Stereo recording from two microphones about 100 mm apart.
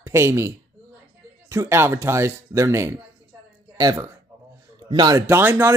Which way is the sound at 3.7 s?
40° right (ahead or behind).